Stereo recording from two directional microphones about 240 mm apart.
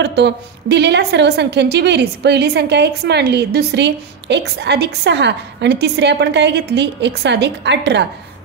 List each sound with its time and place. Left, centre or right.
0.0 s a woman's voice: right